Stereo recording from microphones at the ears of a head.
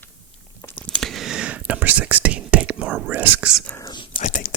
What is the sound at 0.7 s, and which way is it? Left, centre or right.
Whispering, right.